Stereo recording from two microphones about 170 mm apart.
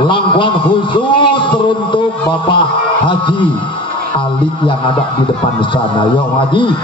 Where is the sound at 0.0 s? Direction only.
30° left (ahead or behind).